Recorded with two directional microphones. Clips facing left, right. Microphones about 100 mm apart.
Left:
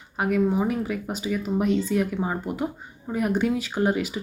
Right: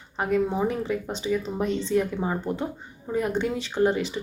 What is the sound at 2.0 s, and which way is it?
Speech, 15° left (ahead or behind).